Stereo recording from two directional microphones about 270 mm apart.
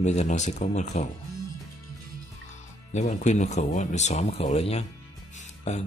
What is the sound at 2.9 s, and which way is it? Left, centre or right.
Speech, left.